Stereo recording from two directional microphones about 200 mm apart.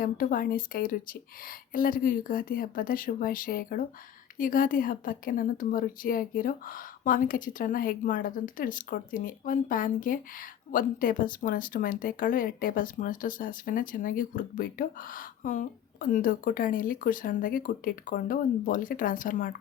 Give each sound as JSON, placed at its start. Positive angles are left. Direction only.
{"t": 0.0, "sound": "a woman's voice", "side_deg": 45}